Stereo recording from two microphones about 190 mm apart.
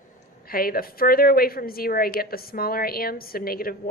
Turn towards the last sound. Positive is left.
turn(degrees=50)  # may be behind; listen again after turning